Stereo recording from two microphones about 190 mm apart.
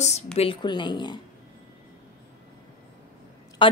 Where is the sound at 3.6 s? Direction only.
25° left (ahead or behind).